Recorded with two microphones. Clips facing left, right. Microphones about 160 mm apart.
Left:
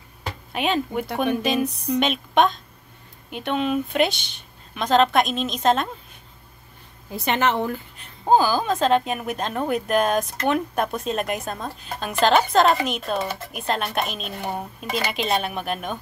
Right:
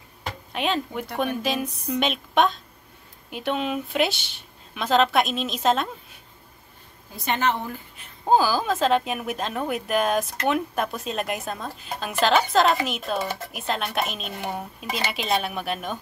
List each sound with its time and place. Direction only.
0.5 s a woman's voice: 5° left (ahead or behind)
7.2 s a woman's voice: 75° left (ahead or behind)
8.0 s a woman's voice: 5° right (ahead or behind)